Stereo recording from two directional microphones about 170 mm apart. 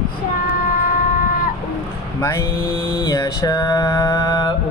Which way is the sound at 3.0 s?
20° left (ahead or behind).